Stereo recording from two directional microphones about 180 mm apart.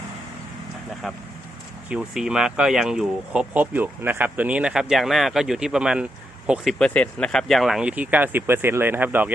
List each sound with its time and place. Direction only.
1.0 s speech: centre (ahead or behind)